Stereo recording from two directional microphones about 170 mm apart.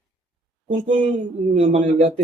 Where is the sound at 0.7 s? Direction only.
45° right (ahead or behind).